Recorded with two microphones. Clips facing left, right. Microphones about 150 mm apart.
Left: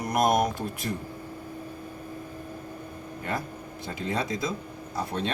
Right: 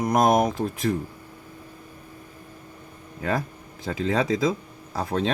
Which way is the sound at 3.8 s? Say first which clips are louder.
Right 6 dB; 90° right.